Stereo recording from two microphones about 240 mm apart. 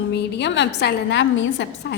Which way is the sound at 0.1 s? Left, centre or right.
Left.